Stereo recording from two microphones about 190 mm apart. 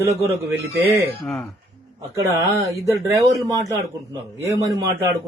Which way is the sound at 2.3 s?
15° right (ahead or behind).